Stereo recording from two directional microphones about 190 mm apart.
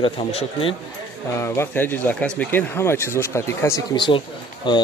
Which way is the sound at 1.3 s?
15° left (ahead or behind).